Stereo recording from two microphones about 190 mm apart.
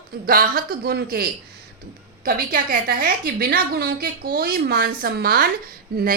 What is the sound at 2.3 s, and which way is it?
A woman's voice, 50° right (ahead or behind).